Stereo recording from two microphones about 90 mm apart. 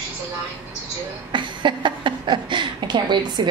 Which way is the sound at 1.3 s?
60° right (ahead or behind).